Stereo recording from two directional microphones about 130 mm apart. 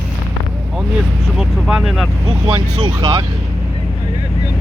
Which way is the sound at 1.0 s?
5° right (ahead or behind).